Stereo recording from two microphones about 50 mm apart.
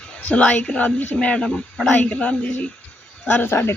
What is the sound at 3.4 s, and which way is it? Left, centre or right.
Speech, left.